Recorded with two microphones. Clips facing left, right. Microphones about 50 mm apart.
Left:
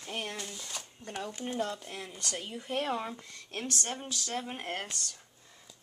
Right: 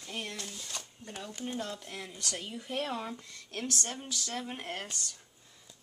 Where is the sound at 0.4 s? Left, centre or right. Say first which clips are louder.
Left 1 dB; centre.